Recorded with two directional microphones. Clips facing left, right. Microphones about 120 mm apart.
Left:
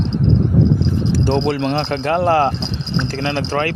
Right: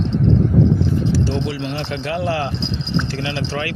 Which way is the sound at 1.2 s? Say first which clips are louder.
Left 6 dB; 60° left (ahead or behind).